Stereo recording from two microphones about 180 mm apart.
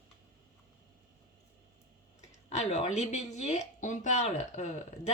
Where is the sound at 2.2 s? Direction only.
40° left (ahead or behind).